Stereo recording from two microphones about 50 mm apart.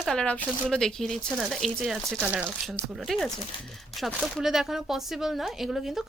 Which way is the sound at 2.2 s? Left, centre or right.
Right.